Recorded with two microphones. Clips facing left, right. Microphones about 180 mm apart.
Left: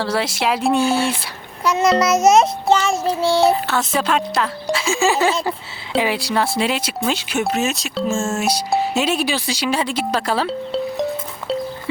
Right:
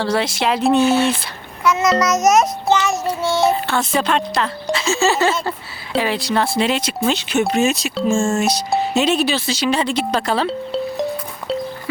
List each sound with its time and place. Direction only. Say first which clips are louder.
0.0 s speech: right 1 dB; 5° left (ahead or behind)
1.6 s child singing: even; 30° left (ahead or behind)
3.4 s speech: left 1 dB; 5° left (ahead or behind)